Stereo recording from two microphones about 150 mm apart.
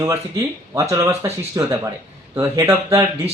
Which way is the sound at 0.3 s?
20° right (ahead or behind).